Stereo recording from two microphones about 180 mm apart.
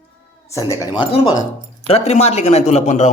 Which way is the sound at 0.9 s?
30° left (ahead or behind).